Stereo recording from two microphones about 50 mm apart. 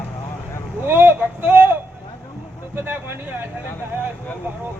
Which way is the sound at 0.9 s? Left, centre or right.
Right.